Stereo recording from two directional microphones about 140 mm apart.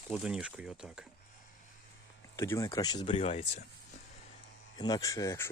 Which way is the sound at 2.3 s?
20° left (ahead or behind).